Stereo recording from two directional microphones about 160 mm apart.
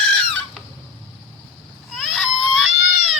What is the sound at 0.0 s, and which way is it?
Chicken, 5° left (ahead or behind).